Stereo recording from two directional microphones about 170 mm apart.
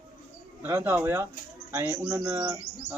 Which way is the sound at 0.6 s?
10° right (ahead or behind).